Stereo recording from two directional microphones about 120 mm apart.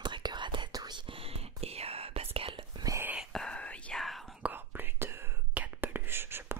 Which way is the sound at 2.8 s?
20° right (ahead or behind).